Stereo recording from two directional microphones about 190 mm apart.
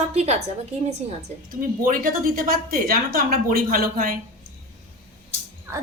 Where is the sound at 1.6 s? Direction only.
45° right (ahead or behind).